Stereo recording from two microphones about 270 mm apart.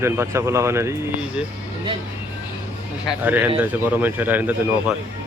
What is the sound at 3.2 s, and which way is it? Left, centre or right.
Speech, centre.